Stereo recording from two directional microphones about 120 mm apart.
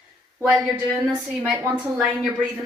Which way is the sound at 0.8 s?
15° right (ahead or behind).